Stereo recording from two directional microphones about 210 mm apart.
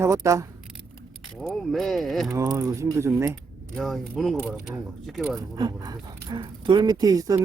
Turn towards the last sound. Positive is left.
turn(degrees=-15)  # may be behind; listen again after turning